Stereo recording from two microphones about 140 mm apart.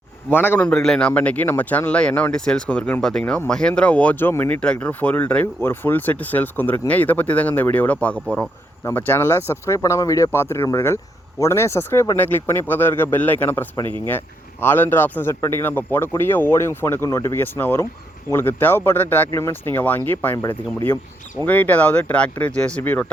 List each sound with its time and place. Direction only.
0.3 s a man's voice: 15° left (ahead or behind)
13.8 s speech: 35° right (ahead or behind)
14.1 s a man's voice: 15° left (ahead or behind)